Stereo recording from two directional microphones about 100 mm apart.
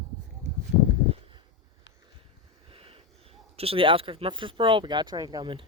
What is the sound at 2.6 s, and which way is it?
Speech, 65° right (ahead or behind).